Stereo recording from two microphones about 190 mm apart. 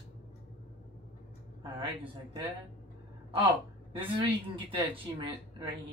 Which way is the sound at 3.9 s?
25° right (ahead or behind).